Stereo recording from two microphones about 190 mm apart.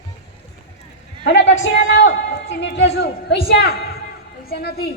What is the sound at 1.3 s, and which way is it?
A woman's voice, 80° left.